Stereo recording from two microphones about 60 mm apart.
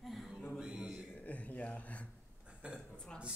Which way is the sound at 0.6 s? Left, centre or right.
Centre.